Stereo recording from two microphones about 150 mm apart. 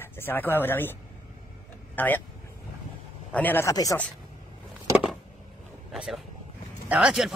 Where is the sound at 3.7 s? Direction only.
25° left (ahead or behind).